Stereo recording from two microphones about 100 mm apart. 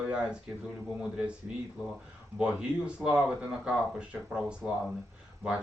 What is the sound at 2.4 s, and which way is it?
A man's voice, 10° right (ahead or behind).